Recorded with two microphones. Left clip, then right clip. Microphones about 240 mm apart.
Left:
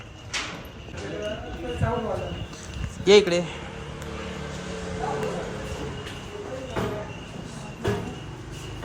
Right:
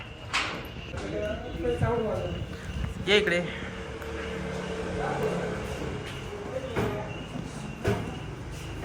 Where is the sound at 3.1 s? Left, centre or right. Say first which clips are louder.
Left 6 dB; centre.